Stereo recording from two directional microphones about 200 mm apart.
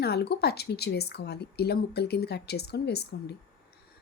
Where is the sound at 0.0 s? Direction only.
55° left (ahead or behind).